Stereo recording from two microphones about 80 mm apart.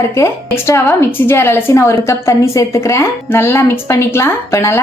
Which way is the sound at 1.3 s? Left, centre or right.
Left.